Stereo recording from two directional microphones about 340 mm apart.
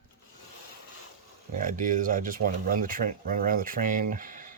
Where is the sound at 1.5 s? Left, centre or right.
Right.